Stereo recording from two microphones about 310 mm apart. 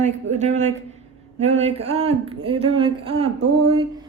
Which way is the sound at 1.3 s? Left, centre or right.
Centre.